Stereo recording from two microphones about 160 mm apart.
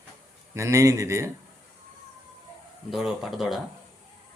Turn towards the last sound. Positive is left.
turn(degrees=0)  # may be behind; listen again after turning